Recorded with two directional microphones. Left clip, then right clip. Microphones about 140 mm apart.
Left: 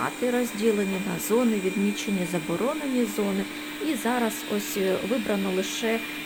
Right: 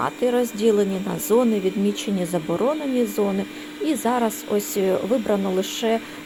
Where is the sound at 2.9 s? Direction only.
20° right (ahead or behind).